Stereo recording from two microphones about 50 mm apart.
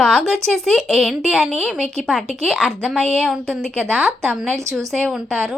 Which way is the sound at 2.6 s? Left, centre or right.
Left.